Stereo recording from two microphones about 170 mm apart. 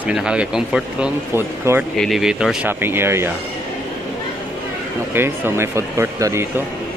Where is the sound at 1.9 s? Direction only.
Centre (ahead or behind).